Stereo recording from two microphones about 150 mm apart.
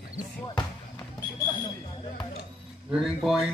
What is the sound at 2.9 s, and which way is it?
Speech, centre (ahead or behind).